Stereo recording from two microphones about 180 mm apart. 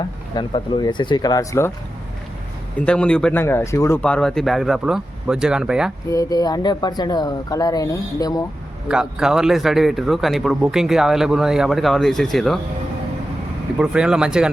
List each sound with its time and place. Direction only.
0.3 s speech: 25° left (ahead or behind)
2.7 s a man's voice: 5° left (ahead or behind)
6.1 s speech: 20° left (ahead or behind)
8.9 s a man's voice: 5° right (ahead or behind)
13.7 s a man's voice: 5° right (ahead or behind)